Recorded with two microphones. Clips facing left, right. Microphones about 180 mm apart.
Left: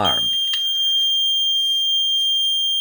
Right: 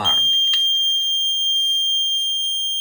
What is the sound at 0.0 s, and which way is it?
Fire alarm, 60° left (ahead or behind).